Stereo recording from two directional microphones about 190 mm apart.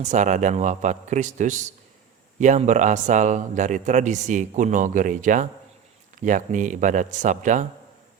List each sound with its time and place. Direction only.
0.0 s a man's voice: 40° right (ahead or behind)